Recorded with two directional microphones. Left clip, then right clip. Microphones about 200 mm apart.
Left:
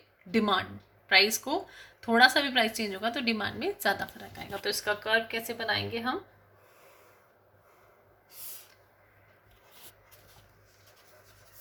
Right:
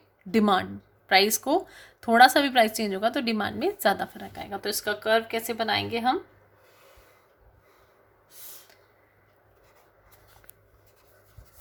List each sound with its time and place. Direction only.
0.3 s speech: 60° right (ahead or behind)